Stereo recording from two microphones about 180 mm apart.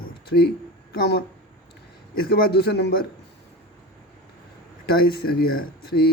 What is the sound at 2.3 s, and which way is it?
Speech, 60° left (ahead or behind).